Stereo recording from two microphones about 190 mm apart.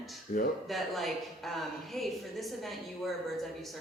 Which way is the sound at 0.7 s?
Centre (ahead or behind).